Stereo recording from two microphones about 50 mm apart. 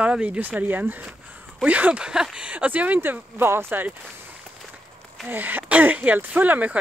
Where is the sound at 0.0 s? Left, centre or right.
Right.